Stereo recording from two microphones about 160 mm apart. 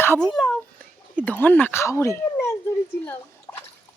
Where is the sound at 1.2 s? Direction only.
10° left (ahead or behind).